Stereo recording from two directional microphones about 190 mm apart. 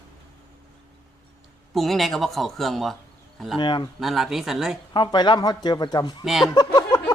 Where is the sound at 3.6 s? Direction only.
25° left (ahead or behind).